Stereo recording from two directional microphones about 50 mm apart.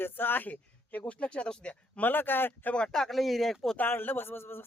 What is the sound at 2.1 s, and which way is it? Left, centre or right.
Speech, left.